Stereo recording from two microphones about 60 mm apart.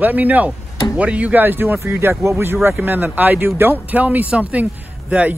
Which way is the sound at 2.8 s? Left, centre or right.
Right.